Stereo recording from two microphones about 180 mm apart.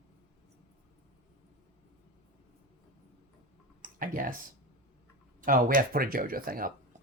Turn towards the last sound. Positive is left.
turn(degrees=-55)  # may be behind; listen again after turning